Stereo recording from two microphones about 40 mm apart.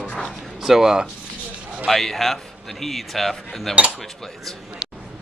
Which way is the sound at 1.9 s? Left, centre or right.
Centre.